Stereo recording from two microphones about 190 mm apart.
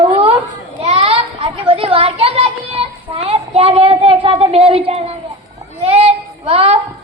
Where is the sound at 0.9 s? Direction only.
30° right (ahead or behind).